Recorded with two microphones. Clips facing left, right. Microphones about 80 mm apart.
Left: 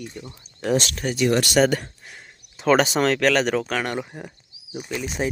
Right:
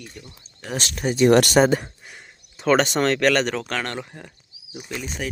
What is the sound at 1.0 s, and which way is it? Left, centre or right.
Speech, centre.